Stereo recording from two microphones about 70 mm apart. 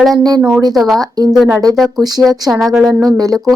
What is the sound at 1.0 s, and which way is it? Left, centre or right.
Speech, right.